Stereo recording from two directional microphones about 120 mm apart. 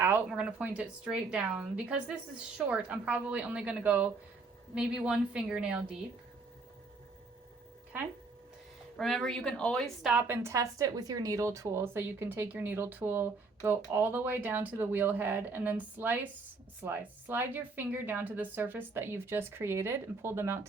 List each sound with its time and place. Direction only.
0.3 s speech: 10° right (ahead or behind)
9.0 s a woman's voice: centre (ahead or behind)
10.2 s speech: 20° right (ahead or behind)